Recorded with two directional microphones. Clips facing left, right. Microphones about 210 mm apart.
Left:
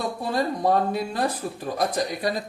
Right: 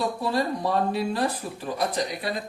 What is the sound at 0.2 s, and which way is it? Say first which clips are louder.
Speech: left 1 dB; 50° left (ahead or behind).